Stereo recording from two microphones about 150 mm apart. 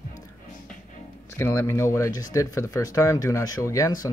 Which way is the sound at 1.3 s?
20° left (ahead or behind).